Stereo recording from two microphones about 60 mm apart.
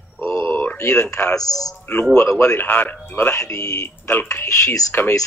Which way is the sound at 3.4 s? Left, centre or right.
Left.